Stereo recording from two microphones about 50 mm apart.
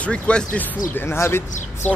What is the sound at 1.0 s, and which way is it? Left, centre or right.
Speech, left.